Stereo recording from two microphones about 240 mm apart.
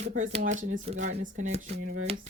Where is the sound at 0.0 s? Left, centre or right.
Right.